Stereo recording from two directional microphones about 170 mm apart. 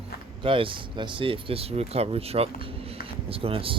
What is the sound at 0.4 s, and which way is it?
Speech, 30° right (ahead or behind).